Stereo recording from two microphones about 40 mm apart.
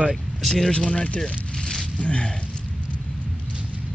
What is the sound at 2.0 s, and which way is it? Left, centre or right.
Speech, left.